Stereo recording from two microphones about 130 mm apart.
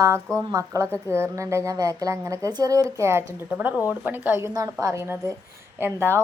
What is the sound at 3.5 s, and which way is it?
A woman's voice, 10° right (ahead or behind).